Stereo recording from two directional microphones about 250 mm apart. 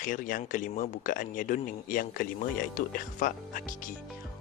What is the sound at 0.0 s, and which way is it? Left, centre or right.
Speech, left.